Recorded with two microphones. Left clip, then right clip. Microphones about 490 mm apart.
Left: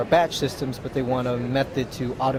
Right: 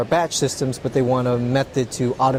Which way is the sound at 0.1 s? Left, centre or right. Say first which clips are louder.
Even; right.